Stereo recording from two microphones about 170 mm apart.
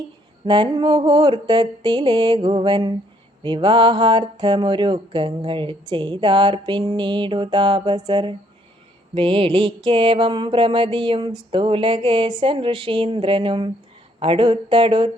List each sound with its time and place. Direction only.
0.4 s speech: 25° right (ahead or behind)